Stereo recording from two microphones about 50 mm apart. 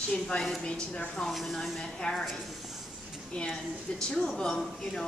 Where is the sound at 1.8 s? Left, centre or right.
Centre.